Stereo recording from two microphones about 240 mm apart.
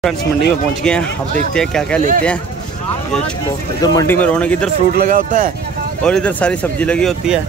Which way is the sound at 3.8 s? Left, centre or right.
Centre.